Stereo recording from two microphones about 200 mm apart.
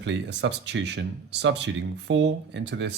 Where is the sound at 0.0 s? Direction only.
60° right (ahead or behind).